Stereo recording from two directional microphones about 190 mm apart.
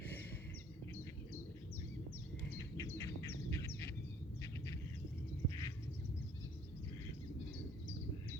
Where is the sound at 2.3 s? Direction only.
15° left (ahead or behind).